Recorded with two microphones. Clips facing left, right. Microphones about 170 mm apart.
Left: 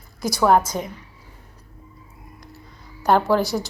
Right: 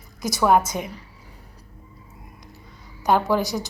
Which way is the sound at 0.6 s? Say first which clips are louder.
Left 1 dB; 20° right (ahead or behind).